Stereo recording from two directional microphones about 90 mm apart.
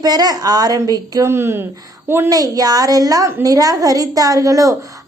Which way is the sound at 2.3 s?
40° right (ahead or behind).